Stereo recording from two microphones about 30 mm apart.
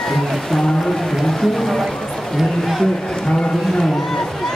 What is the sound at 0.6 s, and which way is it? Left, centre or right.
Speech, centre.